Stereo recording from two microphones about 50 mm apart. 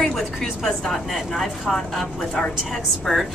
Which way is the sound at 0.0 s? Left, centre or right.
Centre.